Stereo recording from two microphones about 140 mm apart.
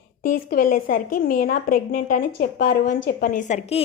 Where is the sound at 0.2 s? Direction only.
90° left; by 3.6 s 65° left (ahead or behind).